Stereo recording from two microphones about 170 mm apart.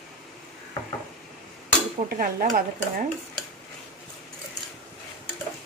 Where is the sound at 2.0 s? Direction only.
55° right (ahead or behind).